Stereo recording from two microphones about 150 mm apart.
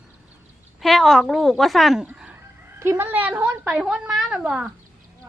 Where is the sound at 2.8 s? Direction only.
15° right (ahead or behind).